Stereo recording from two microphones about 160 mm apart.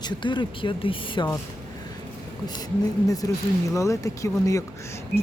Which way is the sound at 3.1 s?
20° left (ahead or behind).